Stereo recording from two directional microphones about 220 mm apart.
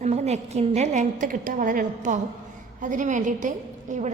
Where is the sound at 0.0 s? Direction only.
30° right (ahead or behind).